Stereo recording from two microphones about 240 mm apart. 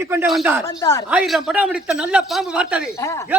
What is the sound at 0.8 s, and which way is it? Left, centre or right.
Speech, centre.